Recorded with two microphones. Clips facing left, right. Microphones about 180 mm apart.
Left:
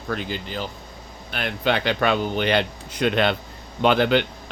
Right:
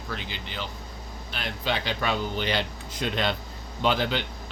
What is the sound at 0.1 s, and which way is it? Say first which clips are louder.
Speech: left 9 dB; 50° left (ahead or behind).